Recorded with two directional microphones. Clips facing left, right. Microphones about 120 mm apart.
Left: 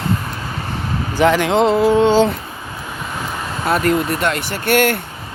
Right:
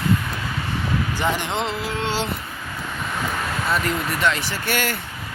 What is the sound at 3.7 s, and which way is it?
Speech, 55° left (ahead or behind).